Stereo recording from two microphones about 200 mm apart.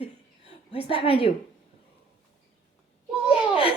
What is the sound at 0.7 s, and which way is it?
Speech, 30° left (ahead or behind).